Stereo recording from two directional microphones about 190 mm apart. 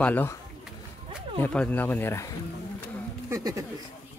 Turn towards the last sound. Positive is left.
turn(degrees=-15)  # may be behind; listen again after turning